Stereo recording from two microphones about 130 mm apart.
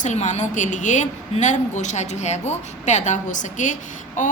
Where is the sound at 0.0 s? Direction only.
70° left (ahead or behind).